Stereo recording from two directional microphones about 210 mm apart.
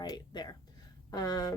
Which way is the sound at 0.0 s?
20° left (ahead or behind).